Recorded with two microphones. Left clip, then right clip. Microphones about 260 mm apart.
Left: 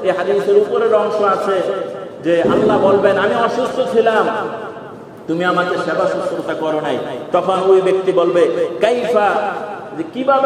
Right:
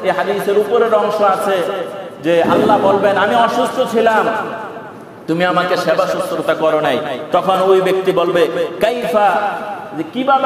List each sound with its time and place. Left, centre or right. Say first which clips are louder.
0.7 s a man's voice: right 1 dB; right
5.4 s a man's voice: right 2 dB; right